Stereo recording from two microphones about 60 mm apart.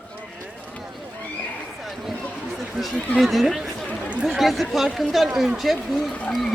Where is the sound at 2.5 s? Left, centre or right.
Centre.